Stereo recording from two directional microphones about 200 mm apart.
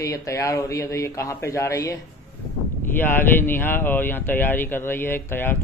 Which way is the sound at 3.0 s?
10° left (ahead or behind).